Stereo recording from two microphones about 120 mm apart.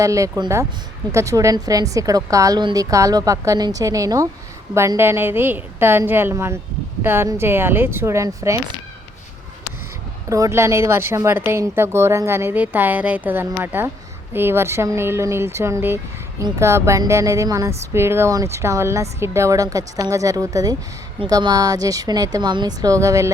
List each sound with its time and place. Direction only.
0.0 s speech: 25° right (ahead or behind)
10.2 s a woman's voice: 25° right (ahead or behind)